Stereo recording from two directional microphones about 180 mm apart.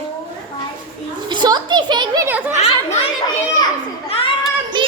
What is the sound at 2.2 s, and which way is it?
Speech, 10° right (ahead or behind).